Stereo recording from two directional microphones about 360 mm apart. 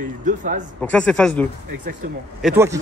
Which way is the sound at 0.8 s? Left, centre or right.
Centre.